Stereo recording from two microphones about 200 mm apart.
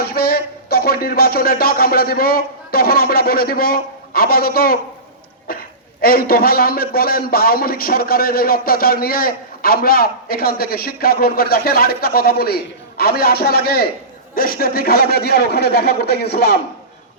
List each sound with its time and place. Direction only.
0.0 s speech: 50° left (ahead or behind)
5.5 s a sound: 50° left (ahead or behind)
6.0 s a man's voice: 50° left (ahead or behind)